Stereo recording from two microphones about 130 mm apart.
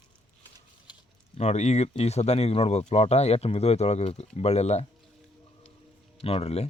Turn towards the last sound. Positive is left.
turn(degrees=55)  # may be behind; listen again after turning